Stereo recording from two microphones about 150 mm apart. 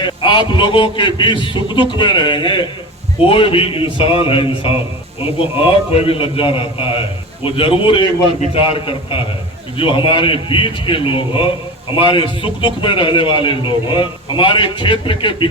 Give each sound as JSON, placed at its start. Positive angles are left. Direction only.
{"t": 0.0, "sound": "a man's voice", "side_deg": 35}